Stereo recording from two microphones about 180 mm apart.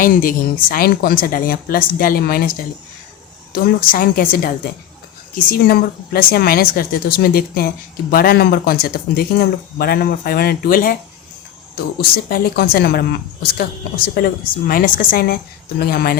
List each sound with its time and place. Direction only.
0.0 s speech: 50° left (ahead or behind)